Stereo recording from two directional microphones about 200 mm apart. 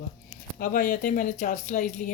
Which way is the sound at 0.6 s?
45° left (ahead or behind).